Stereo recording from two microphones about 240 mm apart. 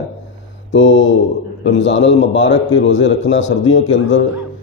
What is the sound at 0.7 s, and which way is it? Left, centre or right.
Mantra, left.